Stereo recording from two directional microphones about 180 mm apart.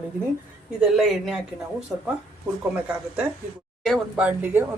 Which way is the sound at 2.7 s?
5° right (ahead or behind).